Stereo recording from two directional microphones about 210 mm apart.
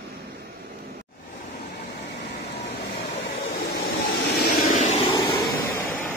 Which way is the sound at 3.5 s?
45° left (ahead or behind).